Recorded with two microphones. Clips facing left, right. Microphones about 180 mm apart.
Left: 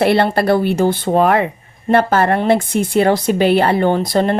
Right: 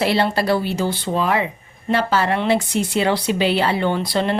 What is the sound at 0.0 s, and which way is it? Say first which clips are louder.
Speech: left 5 dB; 55° left (ahead or behind).